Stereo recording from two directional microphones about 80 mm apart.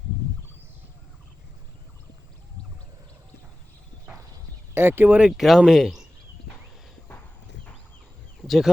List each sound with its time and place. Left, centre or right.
4.7 s speech: right
5.4 s speech: centre
8.4 s speech: centre